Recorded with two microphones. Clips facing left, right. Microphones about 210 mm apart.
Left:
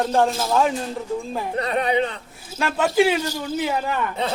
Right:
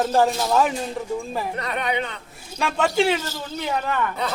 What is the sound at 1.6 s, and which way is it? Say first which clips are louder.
Speech: left 8 dB; 30° left (ahead or behind).